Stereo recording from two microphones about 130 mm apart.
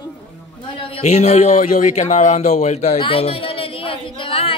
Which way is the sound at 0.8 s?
50° left (ahead or behind).